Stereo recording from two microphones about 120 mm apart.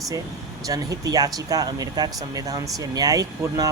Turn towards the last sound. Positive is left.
turn(degrees=-30)  # may be behind; listen again after turning